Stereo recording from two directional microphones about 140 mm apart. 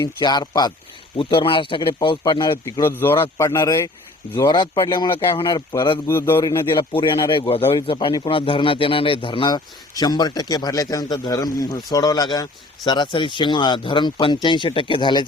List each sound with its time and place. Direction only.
0.0 s a man's voice: 30° left (ahead or behind)
2.8 s speech: 15° left (ahead or behind)
4.4 s a man's voice: 30° left (ahead or behind)
6.1 s speech: 15° left (ahead or behind)
6.9 s a man's voice: 35° left (ahead or behind)